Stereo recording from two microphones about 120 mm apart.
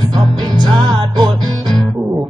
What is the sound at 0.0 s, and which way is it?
Music, 35° right (ahead or behind).